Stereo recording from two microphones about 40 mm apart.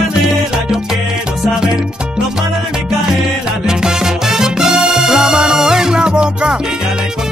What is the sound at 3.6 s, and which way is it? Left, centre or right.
Music, centre.